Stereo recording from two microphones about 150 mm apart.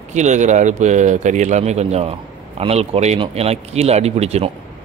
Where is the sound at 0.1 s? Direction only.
50° right (ahead or behind).